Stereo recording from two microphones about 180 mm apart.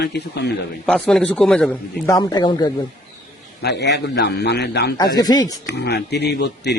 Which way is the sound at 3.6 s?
70° left (ahead or behind).